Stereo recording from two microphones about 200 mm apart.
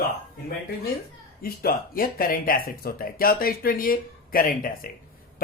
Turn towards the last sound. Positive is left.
turn(degrees=45)  # may be behind; listen again after turning